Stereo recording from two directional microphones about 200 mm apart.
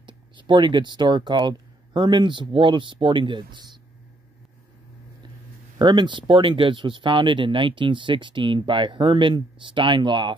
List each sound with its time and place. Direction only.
0.0 s speech: 25° right (ahead or behind)
5.8 s speech: 20° right (ahead or behind)